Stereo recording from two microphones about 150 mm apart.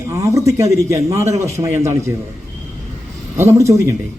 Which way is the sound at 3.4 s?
20° right (ahead or behind).